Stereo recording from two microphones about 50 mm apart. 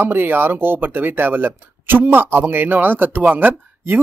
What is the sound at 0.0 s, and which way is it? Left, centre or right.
Speech, right.